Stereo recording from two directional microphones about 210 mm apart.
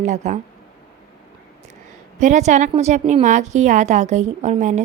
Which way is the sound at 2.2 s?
35° right (ahead or behind).